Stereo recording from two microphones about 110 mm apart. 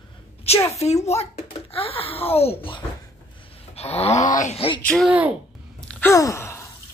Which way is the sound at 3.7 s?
70° left (ahead or behind).